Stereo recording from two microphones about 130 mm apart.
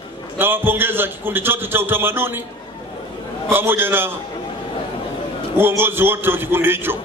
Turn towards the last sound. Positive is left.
turn(degrees=-15)  # may be behind; listen again after turning